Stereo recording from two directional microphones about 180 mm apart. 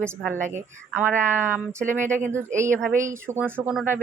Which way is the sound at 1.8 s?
45° right (ahead or behind).